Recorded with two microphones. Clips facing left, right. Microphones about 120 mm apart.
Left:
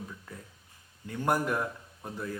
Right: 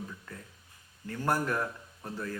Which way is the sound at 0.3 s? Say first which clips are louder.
Even; 10° left (ahead or behind).